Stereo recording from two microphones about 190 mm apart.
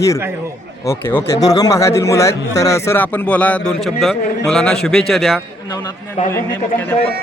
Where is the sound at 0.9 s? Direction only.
15° left (ahead or behind).